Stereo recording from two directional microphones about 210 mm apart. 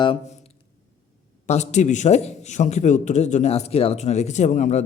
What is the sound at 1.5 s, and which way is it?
A man's voice, 35° left (ahead or behind).